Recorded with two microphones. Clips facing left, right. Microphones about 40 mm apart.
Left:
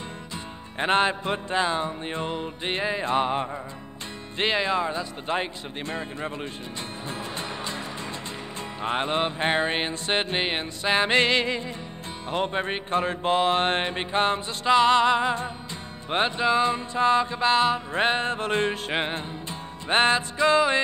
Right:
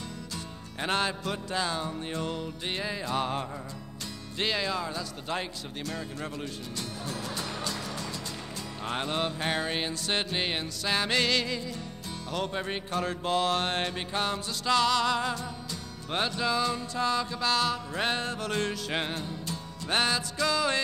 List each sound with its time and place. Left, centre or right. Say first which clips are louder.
0.7 s music: left 7 dB; left
8.8 s music: left 5 dB; left